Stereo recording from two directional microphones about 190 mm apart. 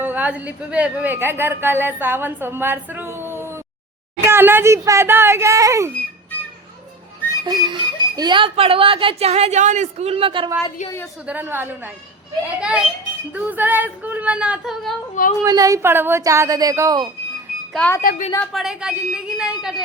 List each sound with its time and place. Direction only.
0.0 s a woman's voice: 10° right (ahead or behind)
5.9 s a sound: 10° left (ahead or behind)
7.4 s speech: 20° right (ahead or behind)
11.3 s a woman's voice: 10° right (ahead or behind)
15.4 s a woman's voice: 20° right (ahead or behind)
17.7 s a woman's voice: 10° left (ahead or behind)
18.0 s a woman's voice: 50° left (ahead or behind)
18.5 s a woman's voice: 5° right (ahead or behind)